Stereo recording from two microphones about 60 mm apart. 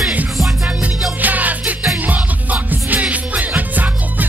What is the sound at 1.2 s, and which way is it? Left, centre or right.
Music, right.